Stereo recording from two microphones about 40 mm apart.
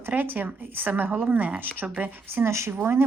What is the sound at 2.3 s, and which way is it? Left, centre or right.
Speech, right.